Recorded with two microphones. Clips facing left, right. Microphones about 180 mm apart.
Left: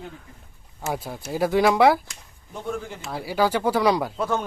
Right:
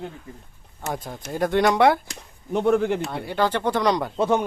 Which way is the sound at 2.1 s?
70° right (ahead or behind).